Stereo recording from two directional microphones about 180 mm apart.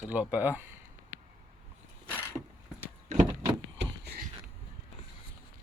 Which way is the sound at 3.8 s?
65° right (ahead or behind).